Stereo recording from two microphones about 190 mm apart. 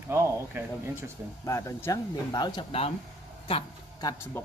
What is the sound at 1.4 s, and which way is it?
A man's voice, 15° left (ahead or behind).